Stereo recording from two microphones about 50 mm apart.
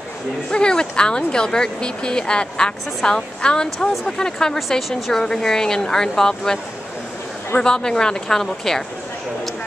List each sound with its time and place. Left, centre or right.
0.5 s speech: centre
4.6 s a woman's voice: centre
7.6 s speech: centre